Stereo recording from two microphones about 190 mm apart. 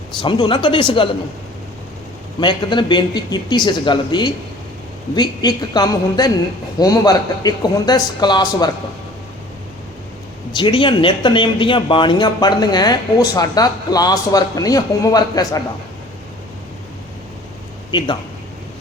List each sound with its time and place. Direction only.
0.2 s speech: 25° left (ahead or behind)
2.4 s speech: 25° left (ahead or behind)
10.5 s speech: 25° left (ahead or behind)
17.9 s speech: 25° left (ahead or behind)